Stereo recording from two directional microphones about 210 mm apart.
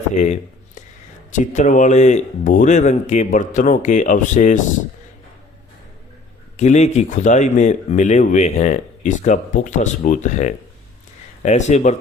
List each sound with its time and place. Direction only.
1.3 s speech: 35° left (ahead or behind)
6.6 s speech: 30° left (ahead or behind)